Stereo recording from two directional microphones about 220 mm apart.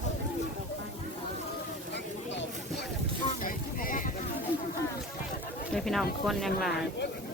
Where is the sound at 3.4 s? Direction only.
40° left (ahead or behind).